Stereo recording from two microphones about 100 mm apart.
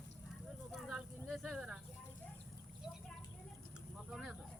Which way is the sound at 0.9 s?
Centre (ahead or behind).